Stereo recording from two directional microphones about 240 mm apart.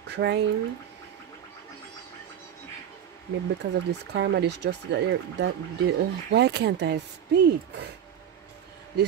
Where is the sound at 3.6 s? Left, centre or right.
Right.